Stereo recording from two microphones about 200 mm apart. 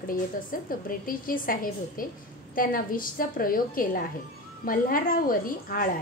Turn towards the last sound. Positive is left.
turn(degrees=45)  # may be behind; listen again after turning